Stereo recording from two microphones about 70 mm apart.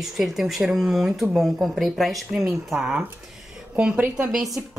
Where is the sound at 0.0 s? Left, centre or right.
Centre.